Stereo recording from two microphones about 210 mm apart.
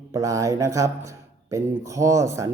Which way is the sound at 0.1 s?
15° right (ahead or behind).